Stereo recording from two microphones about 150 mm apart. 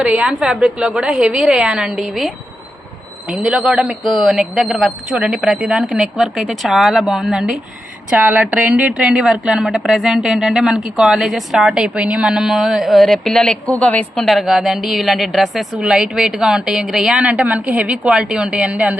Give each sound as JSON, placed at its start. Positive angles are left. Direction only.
{"t": 0.0, "sound": "a woman's voice", "side_deg": -10}
{"t": 8.1, "sound": "a woman's voice", "side_deg": -10}